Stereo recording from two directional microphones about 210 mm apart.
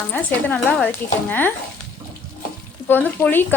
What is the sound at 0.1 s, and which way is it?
A woman's voice, 10° left (ahead or behind).